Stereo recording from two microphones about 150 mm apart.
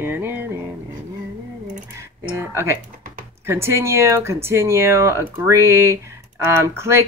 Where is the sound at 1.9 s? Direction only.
20° right (ahead or behind).